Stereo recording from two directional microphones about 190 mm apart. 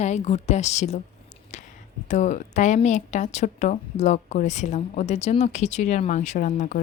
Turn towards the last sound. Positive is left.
turn(degrees=40)  # may be behind; listen again after turning